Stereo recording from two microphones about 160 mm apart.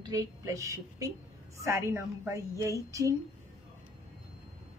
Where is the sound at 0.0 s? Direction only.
20° right (ahead or behind).